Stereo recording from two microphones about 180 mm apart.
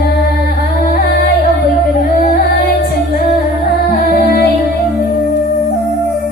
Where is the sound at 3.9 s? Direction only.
60° left (ahead or behind).